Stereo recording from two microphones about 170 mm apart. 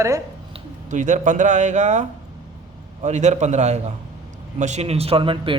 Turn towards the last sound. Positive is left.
turn(degrees=-30)  # may be behind; listen again after turning